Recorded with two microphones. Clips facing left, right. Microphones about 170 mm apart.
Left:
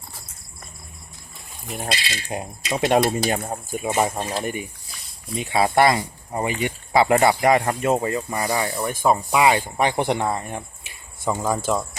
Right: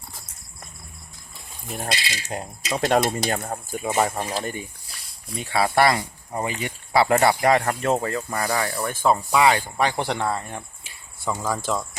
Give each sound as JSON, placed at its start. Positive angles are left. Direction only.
{"t": 2.3, "sound": "speech", "side_deg": 15}